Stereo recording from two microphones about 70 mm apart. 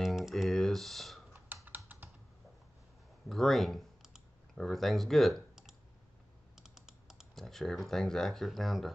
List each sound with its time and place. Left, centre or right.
0.0 s computer keyboard: centre
1.9 s computer keyboard: right
3.3 s computer keyboard: centre
4.6 s speech: centre
6.5 s computer keyboard: centre